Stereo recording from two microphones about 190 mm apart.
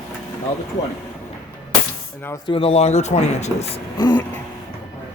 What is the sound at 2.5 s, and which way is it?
Speech, 30° left (ahead or behind).